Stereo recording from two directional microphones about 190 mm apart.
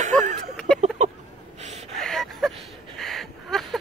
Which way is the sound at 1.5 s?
35° right (ahead or behind).